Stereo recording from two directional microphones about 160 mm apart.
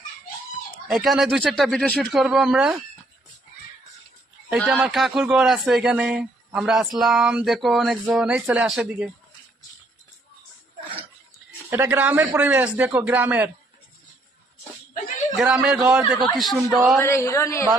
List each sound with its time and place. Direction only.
0.9 s a man's voice: centre (ahead or behind)
4.5 s a man's voice: 5° right (ahead or behind)
11.7 s a man's voice: 10° right (ahead or behind)
15.4 s a man's voice: 5° right (ahead or behind)
17.0 s a man's voice: 15° left (ahead or behind)